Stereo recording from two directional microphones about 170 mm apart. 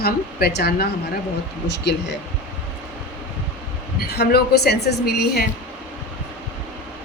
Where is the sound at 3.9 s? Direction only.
70° left (ahead or behind).